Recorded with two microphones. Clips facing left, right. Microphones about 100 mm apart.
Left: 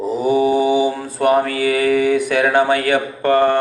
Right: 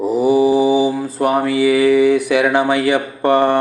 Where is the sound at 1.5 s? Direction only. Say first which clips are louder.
Right 4 dB; 50° left (ahead or behind).